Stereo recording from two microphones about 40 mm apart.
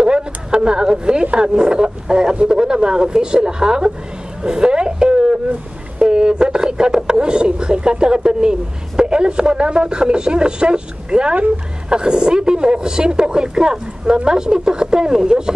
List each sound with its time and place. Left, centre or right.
0.0 s a sound: right
1.3 s speech: right
11.3 s speech: right
11.9 s speech: right